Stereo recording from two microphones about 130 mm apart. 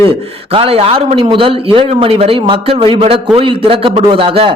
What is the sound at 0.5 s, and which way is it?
A man's voice, 50° right (ahead or behind).